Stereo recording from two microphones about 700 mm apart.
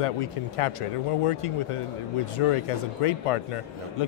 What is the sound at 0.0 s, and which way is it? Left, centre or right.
A man's voice, left.